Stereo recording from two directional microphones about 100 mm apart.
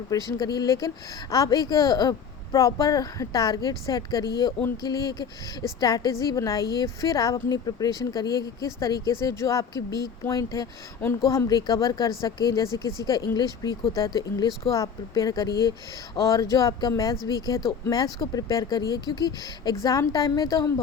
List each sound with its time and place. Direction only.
0.3 s speech: 40° left (ahead or behind)